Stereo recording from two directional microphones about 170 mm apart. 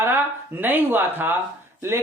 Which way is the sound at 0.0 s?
15° right (ahead or behind).